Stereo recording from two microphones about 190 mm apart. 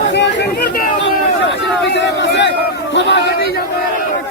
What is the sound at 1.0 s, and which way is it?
Crowd, 70° left (ahead or behind).